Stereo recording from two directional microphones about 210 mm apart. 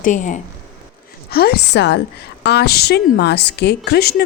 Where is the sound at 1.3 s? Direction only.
45° left (ahead or behind).